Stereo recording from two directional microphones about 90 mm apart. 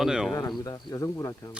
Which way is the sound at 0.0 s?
5° right (ahead or behind).